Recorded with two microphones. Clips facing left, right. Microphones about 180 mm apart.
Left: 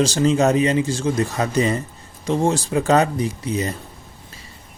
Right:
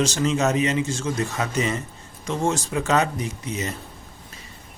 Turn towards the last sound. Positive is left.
turn(degrees=35)  # may be behind; listen again after turning